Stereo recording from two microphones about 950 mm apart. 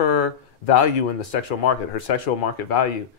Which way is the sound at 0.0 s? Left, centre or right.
Left.